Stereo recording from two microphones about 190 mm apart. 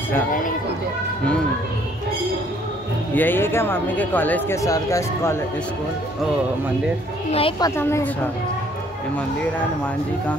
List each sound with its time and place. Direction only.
3.2 s speech: 10° left (ahead or behind)
7.3 s speech: 25° left (ahead or behind)